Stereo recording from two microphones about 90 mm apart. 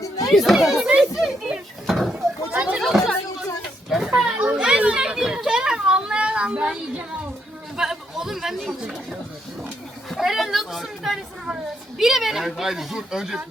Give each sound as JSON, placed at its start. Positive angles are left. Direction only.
{"t": 0.0, "sound": "chatter", "side_deg": 40}
{"t": 0.3, "sound": "speech", "side_deg": 0}
{"t": 0.8, "sound": "children playing", "side_deg": -10}
{"t": 1.9, "sound": "sheep", "side_deg": 0}
{"t": 2.1, "sound": "a sound", "side_deg": -15}
{"t": 2.7, "sound": "chatter", "side_deg": 0}
{"t": 3.8, "sound": "a sound", "side_deg": 0}
{"t": 4.1, "sound": "children playing", "side_deg": -15}
{"t": 7.8, "sound": "speech", "side_deg": -5}
{"t": 10.1, "sound": "a sound", "side_deg": 0}
{"t": 11.9, "sound": "speech", "side_deg": -5}